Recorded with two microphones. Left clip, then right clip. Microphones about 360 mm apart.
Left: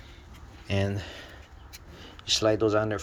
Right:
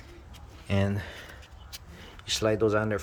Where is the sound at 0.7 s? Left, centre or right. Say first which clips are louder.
Even; centre.